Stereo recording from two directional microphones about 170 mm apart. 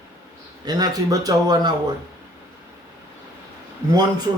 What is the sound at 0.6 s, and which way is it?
Speech, 25° right (ahead or behind).